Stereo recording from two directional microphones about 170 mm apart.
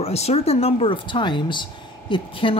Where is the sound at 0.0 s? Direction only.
40° left (ahead or behind).